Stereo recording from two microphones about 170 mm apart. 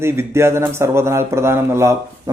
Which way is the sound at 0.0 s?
15° right (ahead or behind).